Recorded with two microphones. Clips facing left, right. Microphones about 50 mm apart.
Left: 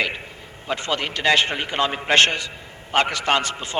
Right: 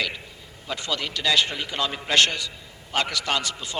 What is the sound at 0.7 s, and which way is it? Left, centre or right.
A man's voice, left.